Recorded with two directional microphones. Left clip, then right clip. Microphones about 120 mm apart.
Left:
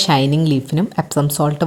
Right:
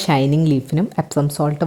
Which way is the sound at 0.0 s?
15° right (ahead or behind).